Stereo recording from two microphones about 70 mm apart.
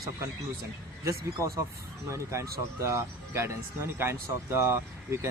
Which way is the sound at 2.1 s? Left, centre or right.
Right.